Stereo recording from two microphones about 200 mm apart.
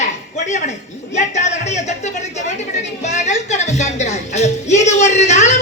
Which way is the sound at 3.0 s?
35° left (ahead or behind).